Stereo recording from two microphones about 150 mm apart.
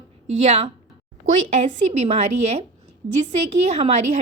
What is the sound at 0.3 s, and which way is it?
Speech, 45° right (ahead or behind).